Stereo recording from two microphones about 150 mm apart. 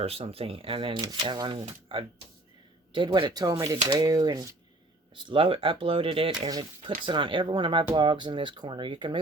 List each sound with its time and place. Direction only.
0.0 s speech: 40° right (ahead or behind)